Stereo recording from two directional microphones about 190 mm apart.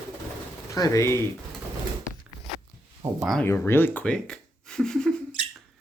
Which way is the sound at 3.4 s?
15° left (ahead or behind).